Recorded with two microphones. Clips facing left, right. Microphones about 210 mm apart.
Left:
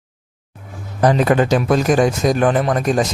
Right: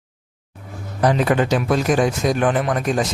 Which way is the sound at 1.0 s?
45° left (ahead or behind).